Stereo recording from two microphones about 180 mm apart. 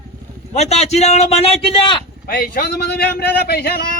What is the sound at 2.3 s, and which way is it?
Speech, 55° left (ahead or behind).